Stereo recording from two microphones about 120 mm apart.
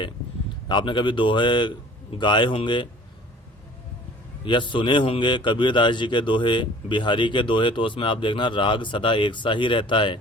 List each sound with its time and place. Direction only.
0.7 s a man's voice: 40° left (ahead or behind)
4.4 s a man's voice: 40° left (ahead or behind)